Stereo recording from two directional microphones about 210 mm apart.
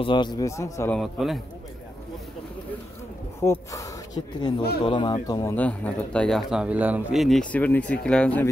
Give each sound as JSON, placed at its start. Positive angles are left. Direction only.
{"t": 0.0, "sound": "a man's voice", "side_deg": 20}
{"t": 0.9, "sound": "speech", "side_deg": 0}
{"t": 3.3, "sound": "speech", "side_deg": 15}